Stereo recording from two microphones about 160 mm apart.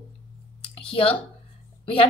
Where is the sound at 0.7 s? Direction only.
35° left (ahead or behind).